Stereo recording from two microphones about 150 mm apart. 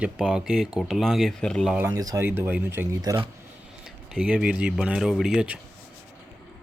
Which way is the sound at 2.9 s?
25° right (ahead or behind).